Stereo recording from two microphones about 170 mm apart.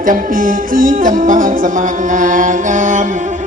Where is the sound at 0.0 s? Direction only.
55° right (ahead or behind).